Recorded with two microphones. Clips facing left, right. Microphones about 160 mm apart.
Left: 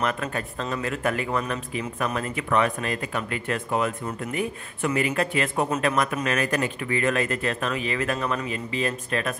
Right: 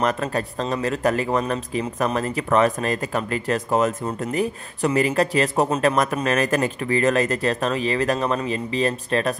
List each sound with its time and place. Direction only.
0.0 s speech: 35° right (ahead or behind)